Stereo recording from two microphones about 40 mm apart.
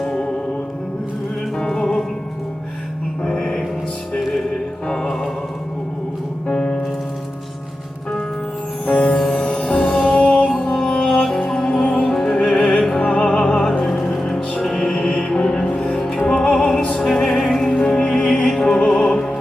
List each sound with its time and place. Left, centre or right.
0.1 s music: left
1.5 s music: centre
3.2 s music: centre
6.5 s music: centre
8.9 s music: left
10.6 s music: centre
16.0 s music: centre
16.2 s music: left
18.4 s music: centre